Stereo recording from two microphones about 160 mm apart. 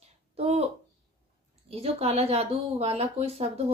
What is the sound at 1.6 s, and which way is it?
Speech, 40° right (ahead or behind).